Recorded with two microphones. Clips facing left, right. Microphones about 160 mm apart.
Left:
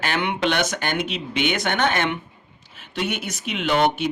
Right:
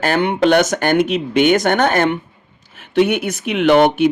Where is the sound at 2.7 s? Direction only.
55° right (ahead or behind).